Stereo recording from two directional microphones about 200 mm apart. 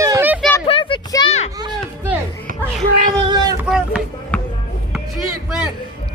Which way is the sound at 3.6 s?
5° right (ahead or behind).